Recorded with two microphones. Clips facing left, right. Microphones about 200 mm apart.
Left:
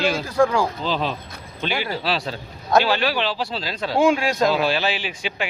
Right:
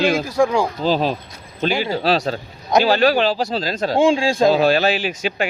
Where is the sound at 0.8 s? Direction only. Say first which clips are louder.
Right 6 dB; 40° right (ahead or behind).